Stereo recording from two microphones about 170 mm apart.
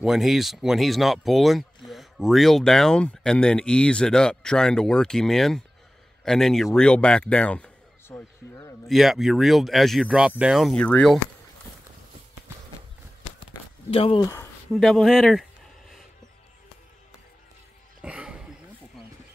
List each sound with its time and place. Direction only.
0.0 s a man's voice: centre (ahead or behind)
13.8 s speech: 35° left (ahead or behind)
14.2 s speech: 15° left (ahead or behind)
14.7 s speech: centre (ahead or behind)
18.0 s a sound: 5° right (ahead or behind)